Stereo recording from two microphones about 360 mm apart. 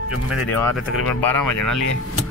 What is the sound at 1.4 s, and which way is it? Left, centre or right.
Speech, left.